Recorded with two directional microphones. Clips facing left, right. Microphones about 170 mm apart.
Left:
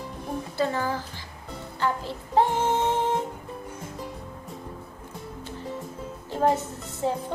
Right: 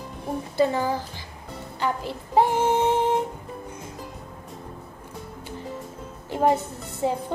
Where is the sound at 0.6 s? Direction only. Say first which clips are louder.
Right 5 dB; 15° right (ahead or behind).